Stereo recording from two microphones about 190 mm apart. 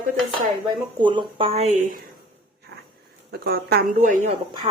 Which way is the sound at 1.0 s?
25° right (ahead or behind).